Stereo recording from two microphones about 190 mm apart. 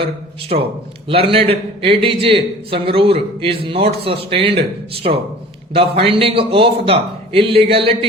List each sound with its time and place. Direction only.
0.0 s a man's voice: 30° right (ahead or behind)